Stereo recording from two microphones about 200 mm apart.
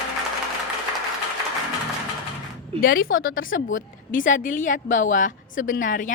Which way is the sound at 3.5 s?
40° left (ahead or behind).